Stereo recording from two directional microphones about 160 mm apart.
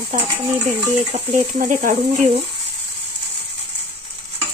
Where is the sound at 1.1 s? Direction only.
40° right (ahead or behind).